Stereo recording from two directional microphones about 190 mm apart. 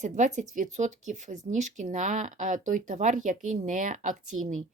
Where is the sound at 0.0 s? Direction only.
40° right (ahead or behind).